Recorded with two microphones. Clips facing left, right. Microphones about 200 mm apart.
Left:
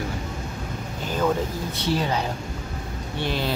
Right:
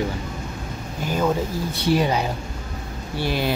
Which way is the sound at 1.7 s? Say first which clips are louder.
Right 5 dB; 10° right (ahead or behind).